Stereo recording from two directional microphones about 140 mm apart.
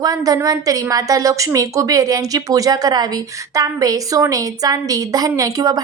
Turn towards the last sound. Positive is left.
turn(degrees=-25)  # may be behind; listen again after turning